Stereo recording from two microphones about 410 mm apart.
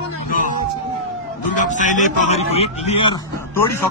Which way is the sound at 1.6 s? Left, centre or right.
Centre.